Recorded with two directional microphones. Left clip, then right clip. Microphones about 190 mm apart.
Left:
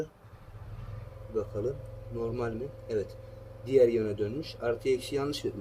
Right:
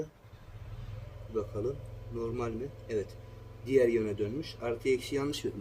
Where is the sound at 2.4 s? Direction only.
20° right (ahead or behind).